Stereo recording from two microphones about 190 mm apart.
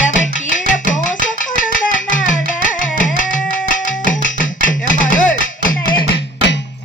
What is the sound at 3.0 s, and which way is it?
Music, 45° left (ahead or behind).